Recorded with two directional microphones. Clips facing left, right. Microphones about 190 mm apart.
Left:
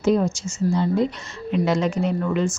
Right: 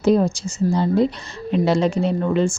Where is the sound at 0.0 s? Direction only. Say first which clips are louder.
Right 3 dB; 35° right (ahead or behind).